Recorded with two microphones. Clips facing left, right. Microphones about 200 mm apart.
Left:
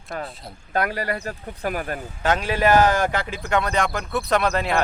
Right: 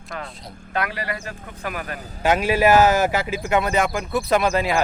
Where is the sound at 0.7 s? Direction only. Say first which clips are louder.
Left 3 dB; 45° left (ahead or behind).